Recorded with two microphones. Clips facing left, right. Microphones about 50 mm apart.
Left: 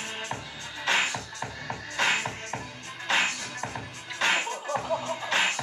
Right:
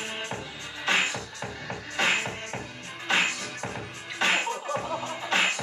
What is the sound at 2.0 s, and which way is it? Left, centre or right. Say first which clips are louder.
Music: right 1 dB; centre.